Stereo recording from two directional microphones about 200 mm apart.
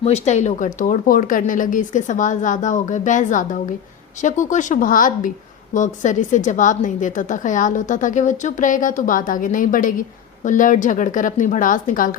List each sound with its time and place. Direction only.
0.0 s a woman's voice: 35° left (ahead or behind)